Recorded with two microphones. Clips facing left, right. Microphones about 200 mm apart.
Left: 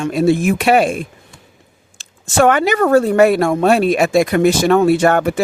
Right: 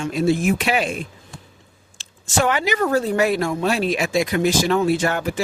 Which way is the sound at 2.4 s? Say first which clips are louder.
Left 8 dB; 55° left (ahead or behind).